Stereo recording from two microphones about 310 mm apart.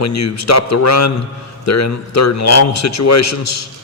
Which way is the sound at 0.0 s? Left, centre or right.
Left.